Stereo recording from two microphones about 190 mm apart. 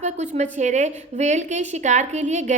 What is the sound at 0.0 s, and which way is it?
A woman's voice, 40° right (ahead or behind).